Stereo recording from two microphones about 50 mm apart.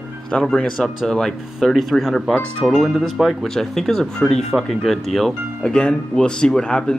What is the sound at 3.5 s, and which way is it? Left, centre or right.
Speech, centre.